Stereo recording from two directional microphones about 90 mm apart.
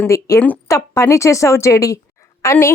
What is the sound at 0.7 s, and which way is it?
A woman's voice, 35° left (ahead or behind).